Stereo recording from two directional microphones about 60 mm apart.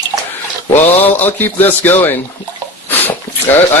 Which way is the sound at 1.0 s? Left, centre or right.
Left.